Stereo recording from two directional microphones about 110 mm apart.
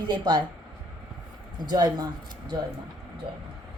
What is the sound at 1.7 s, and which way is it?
Speech, 40° right (ahead or behind).